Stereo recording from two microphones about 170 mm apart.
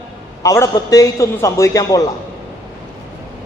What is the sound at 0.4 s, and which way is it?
A man's voice, 20° left (ahead or behind).